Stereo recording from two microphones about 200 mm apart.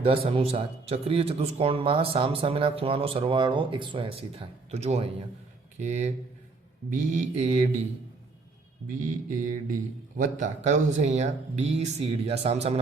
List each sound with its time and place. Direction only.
0.0 s a man's voice: 25° right (ahead or behind)
8.9 s mantra: 45° right (ahead or behind)
10.2 s speech: 40° right (ahead or behind)